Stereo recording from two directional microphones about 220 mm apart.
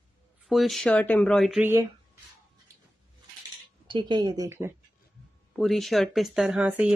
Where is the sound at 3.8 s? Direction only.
20° right (ahead or behind).